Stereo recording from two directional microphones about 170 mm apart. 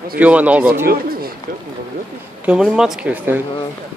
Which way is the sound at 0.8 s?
60° right (ahead or behind).